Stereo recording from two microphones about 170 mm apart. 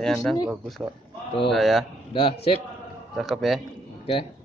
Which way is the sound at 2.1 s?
30° left (ahead or behind).